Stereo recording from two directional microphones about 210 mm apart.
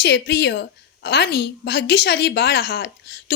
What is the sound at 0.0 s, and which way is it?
A woman's voice, 50° left (ahead or behind).